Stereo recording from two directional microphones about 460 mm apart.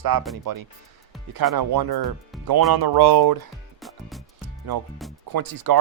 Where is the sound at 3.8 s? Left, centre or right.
Centre.